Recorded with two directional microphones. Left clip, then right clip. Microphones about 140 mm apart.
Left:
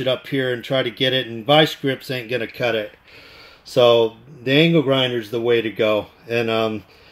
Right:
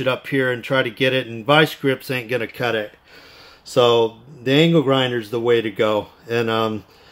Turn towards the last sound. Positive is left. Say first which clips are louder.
# even
turn(degrees=-15)  # may be behind; listen again after turning